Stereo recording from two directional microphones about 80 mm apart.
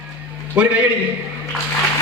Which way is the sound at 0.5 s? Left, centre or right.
Centre.